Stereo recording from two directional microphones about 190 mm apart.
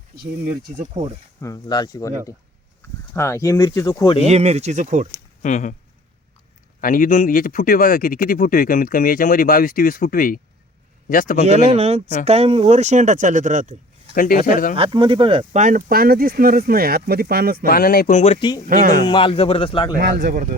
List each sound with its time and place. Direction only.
0.8 s speech: 35° right (ahead or behind)
1.4 s speech: 20° left (ahead or behind)
4.3 s speech: 35° right (ahead or behind)
5.4 s speech: 40° left (ahead or behind)
6.8 s speech: 45° left (ahead or behind)
11.4 s speech: 35° right (ahead or behind)
14.1 s speech: 45° left (ahead or behind)
14.8 s speech: 25° right (ahead or behind); by 17.7 s 50° right (ahead or behind)
17.7 s speech: 50° left (ahead or behind)
18.2 s a man's voice: 30° left (ahead or behind)
18.7 s speech: 50° right (ahead or behind)
19.0 s a man's voice: 25° left (ahead or behind)
20.0 s speech: 50° right (ahead or behind)